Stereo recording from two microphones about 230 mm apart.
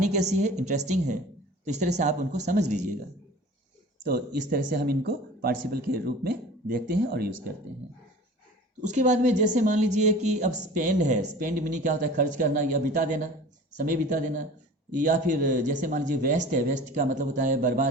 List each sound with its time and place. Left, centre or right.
0.0 s a woman's voice: right
4.4 s a woman's voice: right
8.8 s a woman's voice: right